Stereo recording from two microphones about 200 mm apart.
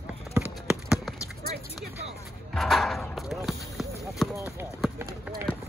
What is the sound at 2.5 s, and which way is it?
Speech, centre (ahead or behind).